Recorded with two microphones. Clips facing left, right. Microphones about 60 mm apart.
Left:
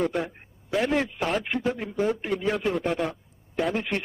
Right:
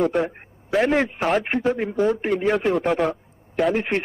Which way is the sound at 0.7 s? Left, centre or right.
Right.